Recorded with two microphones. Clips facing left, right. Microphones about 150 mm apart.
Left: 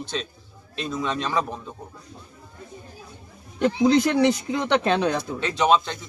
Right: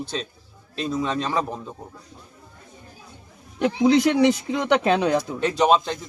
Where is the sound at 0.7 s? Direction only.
35° right (ahead or behind).